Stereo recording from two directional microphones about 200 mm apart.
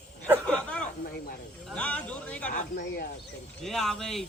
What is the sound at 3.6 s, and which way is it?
Speech, centre (ahead or behind).